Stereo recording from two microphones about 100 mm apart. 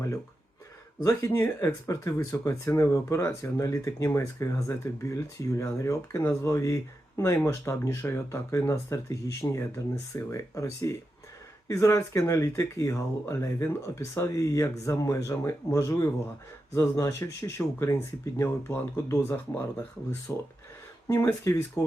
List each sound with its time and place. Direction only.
1.0 s speech: 25° left (ahead or behind)